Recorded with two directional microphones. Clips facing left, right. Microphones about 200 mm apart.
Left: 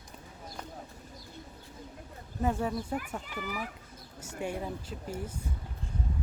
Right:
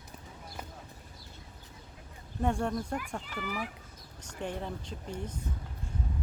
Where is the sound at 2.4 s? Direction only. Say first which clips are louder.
Even; 5° left (ahead or behind).